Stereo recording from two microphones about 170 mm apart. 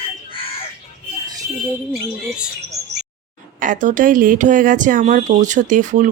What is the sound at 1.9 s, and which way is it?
Speech, 5° right (ahead or behind).